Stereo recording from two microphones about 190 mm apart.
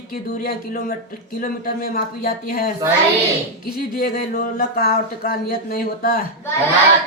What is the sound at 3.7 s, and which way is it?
Speech, 55° left (ahead or behind).